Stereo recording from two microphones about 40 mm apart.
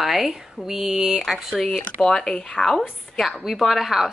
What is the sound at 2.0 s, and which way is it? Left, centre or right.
Speech, centre.